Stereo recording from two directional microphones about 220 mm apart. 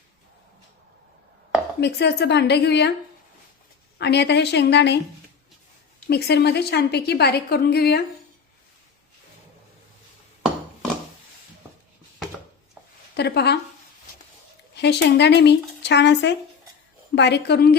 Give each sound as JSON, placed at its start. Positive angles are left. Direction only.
{"t": 1.8, "sound": "a woman's voice", "side_deg": 50}
{"t": 3.9, "sound": "a woman's voice", "side_deg": 50}
{"t": 6.1, "sound": "a woman's voice", "side_deg": 45}
{"t": 13.1, "sound": "a woman's voice", "side_deg": 50}
{"t": 14.8, "sound": "a woman's voice", "side_deg": 50}